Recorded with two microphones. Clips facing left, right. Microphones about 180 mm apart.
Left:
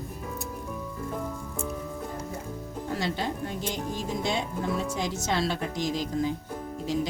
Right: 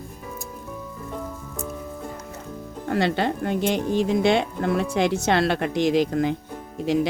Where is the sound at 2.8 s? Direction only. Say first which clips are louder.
Right 8 dB; 65° right (ahead or behind).